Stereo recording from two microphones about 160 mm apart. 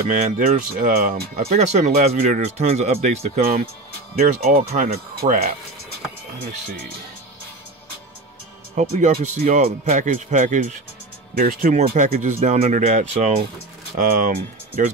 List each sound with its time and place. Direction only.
0.1 s speech: 50° right (ahead or behind)
5.2 s speech: 40° right (ahead or behind)
8.7 s speech: 45° right (ahead or behind)